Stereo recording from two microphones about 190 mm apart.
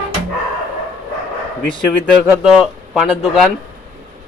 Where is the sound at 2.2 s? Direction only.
5° right (ahead or behind).